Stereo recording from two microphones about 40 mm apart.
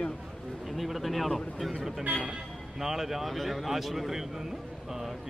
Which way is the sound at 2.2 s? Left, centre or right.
Right.